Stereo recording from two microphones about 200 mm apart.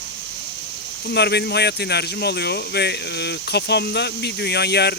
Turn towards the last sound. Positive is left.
turn(degrees=55)  # may be behind; listen again after turning